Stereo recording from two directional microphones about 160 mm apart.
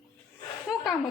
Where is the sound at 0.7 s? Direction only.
Centre (ahead or behind).